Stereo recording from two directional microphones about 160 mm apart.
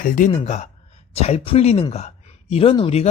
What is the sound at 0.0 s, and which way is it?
Speech, 55° left (ahead or behind).